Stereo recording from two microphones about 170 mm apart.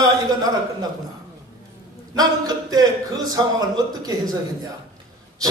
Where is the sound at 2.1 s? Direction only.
20° right (ahead or behind).